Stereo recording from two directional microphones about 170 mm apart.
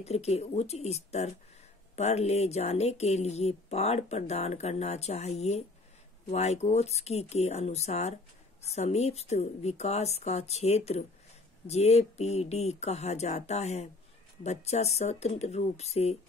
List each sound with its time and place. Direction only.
0.0 s speech: 40° left (ahead or behind)